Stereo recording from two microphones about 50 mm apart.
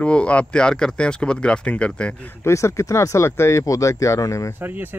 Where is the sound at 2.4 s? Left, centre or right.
Left.